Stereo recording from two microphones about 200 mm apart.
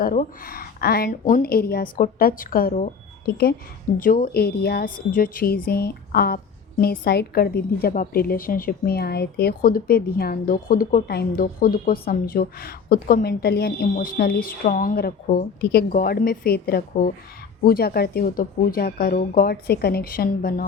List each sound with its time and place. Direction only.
0.0 s a woman's voice: 45° left (ahead or behind)